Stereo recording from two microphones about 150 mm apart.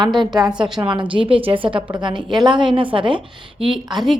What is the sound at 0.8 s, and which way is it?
A woman's voice, 30° right (ahead or behind).